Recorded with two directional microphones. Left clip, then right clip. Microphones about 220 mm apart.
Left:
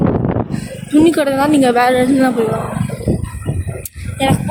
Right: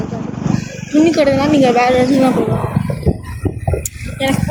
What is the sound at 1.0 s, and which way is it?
Speech, 30° left (ahead or behind).